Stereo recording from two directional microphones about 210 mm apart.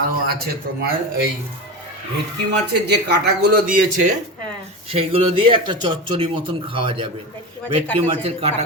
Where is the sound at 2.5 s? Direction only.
55° right (ahead or behind).